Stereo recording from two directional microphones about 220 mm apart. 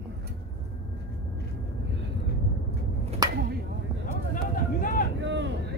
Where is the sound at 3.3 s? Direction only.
45° right (ahead or behind).